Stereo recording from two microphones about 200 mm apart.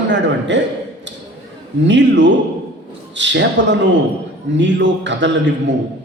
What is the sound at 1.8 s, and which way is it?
A man's voice, 65° right (ahead or behind).